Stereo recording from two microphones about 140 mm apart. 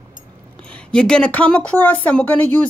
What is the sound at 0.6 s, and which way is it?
A woman's voice, 10° left (ahead or behind).